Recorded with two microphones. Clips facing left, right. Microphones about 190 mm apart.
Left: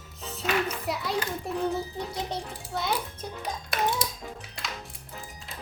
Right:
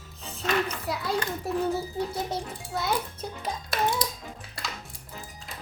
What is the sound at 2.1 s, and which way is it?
Speech, 5° right (ahead or behind).